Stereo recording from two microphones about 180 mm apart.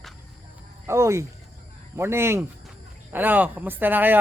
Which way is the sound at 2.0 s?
15° right (ahead or behind).